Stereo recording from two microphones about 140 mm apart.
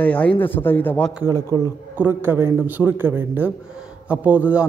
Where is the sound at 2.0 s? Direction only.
15° right (ahead or behind).